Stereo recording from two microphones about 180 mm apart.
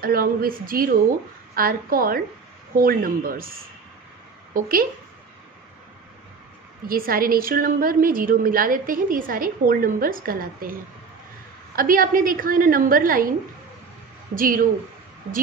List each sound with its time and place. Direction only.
0.0 s a woman's voice: 55° right (ahead or behind)
4.6 s a woman's voice: 55° right (ahead or behind)
6.9 s a woman's voice: 55° right (ahead or behind)
14.3 s a woman's voice: 50° right (ahead or behind)